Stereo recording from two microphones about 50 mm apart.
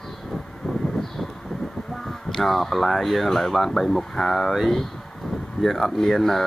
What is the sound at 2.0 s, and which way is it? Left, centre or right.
Speech, centre.